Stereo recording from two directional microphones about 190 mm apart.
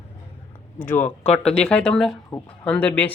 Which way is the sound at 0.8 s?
40° left (ahead or behind).